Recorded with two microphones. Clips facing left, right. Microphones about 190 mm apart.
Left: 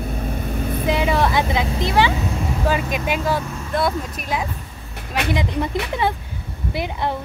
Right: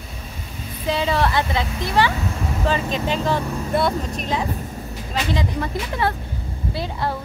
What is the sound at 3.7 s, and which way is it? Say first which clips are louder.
Speech: even; 5° right (ahead or behind).